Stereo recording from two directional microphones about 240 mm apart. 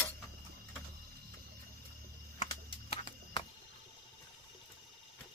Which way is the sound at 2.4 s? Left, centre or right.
Left.